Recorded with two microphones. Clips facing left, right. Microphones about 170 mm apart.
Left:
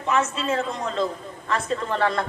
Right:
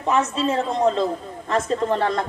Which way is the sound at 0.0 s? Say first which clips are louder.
Right 3 dB; 35° right (ahead or behind).